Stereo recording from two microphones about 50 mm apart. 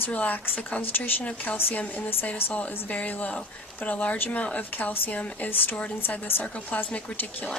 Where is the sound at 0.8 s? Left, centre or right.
Left.